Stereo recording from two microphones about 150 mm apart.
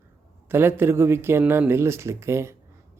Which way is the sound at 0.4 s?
15° right (ahead or behind).